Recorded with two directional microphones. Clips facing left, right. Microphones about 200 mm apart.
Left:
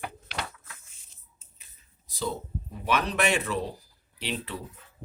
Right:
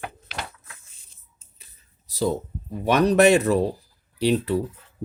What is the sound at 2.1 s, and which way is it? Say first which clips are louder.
Speech: right 8 dB; 40° right (ahead or behind).